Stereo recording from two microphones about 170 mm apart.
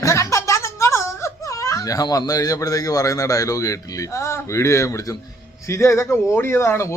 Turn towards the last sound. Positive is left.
turn(degrees=15)  # may be behind; listen again after turning